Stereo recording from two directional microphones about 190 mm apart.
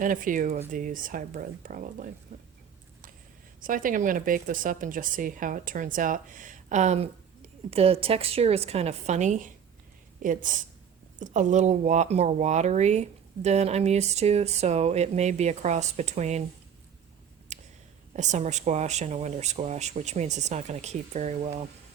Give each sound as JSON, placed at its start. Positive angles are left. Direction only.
{"t": 0.0, "sound": "speech", "side_deg": -45}
{"t": 3.6, "sound": "speech", "side_deg": -45}
{"t": 17.5, "sound": "a sound", "side_deg": -40}
{"t": 18.2, "sound": "speech", "side_deg": -40}